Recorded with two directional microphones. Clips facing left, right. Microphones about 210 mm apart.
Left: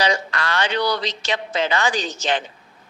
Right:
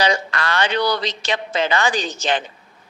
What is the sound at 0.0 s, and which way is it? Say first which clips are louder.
A woman's voice: right 2 dB; 55° right (ahead or behind).